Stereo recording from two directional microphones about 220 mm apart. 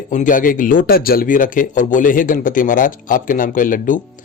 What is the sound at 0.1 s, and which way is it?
A man's voice, 35° left (ahead or behind).